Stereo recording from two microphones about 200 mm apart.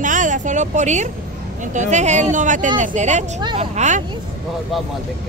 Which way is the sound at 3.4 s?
25° right (ahead or behind).